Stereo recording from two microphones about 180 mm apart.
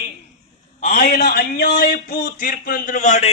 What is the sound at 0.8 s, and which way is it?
A man's voice, 50° left (ahead or behind).